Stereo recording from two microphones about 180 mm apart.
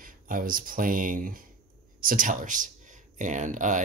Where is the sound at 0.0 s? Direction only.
50° right (ahead or behind).